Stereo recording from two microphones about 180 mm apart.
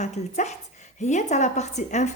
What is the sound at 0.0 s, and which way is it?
A woman's voice, 40° left (ahead or behind).